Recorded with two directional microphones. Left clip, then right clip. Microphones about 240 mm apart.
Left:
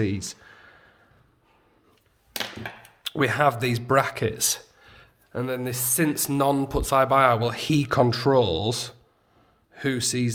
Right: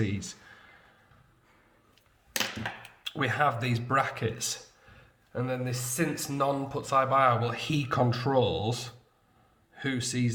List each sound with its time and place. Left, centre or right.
0.0 s speech: left
3.0 s speech: left